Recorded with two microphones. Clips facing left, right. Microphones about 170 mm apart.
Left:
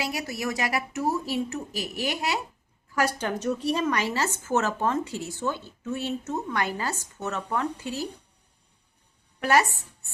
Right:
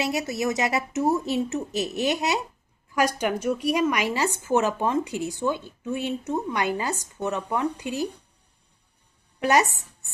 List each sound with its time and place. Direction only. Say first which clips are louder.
0.0 s a woman's voice: right 5 dB; 25° right (ahead or behind)
9.4 s speech: right 1 dB; 20° right (ahead or behind)